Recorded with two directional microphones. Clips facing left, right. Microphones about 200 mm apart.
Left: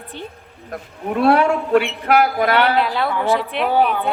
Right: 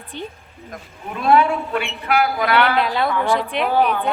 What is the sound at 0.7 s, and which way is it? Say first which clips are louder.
A man's voice: left 8 dB; 65° left (ahead or behind).